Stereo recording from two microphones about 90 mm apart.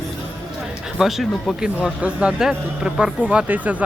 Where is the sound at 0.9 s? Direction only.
Centre (ahead or behind).